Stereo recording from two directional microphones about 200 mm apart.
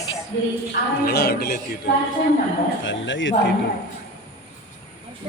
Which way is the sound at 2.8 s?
70° left (ahead or behind).